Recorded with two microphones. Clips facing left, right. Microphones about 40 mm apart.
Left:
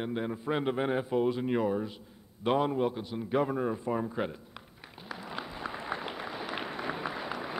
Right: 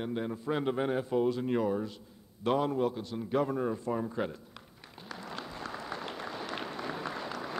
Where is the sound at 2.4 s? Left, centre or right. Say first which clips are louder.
Left 1 dB; centre.